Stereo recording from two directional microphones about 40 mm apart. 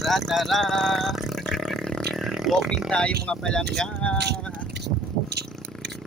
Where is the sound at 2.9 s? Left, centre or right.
Left.